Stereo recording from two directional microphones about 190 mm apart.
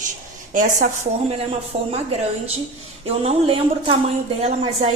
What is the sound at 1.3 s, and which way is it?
Speech, 30° right (ahead or behind).